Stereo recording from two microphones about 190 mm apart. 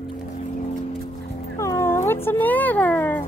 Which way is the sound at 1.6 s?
15° left (ahead or behind).